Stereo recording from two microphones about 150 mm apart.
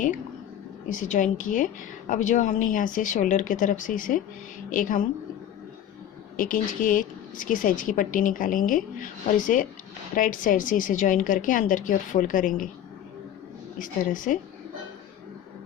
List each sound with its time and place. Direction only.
0.9 s speech: 55° left (ahead or behind)
6.3 s speech: 65° left (ahead or behind)
13.7 s speech: 60° left (ahead or behind)